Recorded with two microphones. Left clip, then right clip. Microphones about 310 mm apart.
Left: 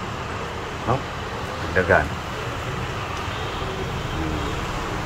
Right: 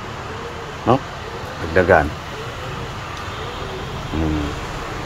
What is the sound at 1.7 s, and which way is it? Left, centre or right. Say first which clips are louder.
Speech: right 5 dB; right.